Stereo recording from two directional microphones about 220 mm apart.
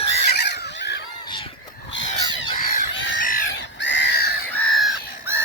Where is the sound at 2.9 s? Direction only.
60° left (ahead or behind).